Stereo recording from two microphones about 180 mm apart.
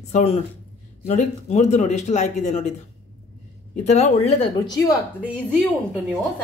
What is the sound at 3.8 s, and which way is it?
Speech, 40° left (ahead or behind).